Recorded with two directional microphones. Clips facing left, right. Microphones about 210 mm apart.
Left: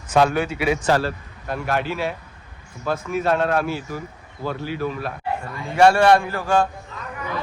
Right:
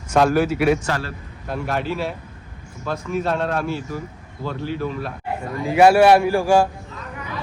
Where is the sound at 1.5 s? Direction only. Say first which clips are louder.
Even; centre (ahead or behind).